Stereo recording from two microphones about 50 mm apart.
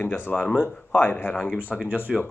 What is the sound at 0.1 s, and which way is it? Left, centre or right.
Speech, left.